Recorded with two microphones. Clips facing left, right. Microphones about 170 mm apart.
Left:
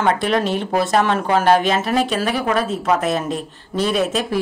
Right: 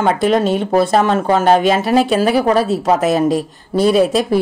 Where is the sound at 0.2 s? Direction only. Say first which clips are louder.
Right 5 dB; 40° right (ahead or behind).